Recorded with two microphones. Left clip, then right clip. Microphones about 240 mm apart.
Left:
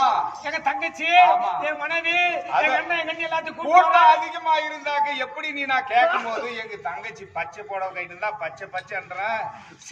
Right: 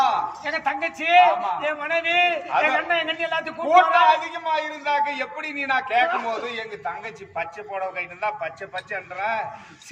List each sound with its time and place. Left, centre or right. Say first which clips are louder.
0.0 s a man's voice: left 1 dB; centre
7.3 s a man's voice: even; centre